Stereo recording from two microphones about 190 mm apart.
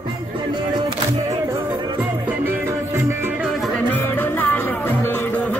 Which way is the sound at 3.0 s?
15° right (ahead or behind).